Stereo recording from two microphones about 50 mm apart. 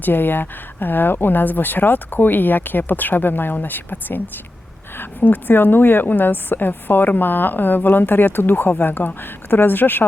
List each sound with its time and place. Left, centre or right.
0.0 s speech: left